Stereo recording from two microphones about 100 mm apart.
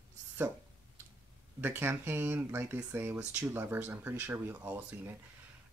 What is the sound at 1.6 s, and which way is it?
Speech, 20° right (ahead or behind).